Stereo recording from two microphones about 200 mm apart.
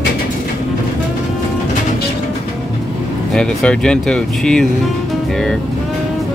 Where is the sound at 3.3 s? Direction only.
5° left (ahead or behind).